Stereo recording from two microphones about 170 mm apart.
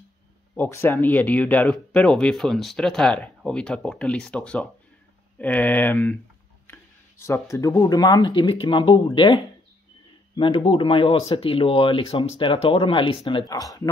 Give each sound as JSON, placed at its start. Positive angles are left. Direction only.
{"t": 0.6, "sound": "speech", "side_deg": 15}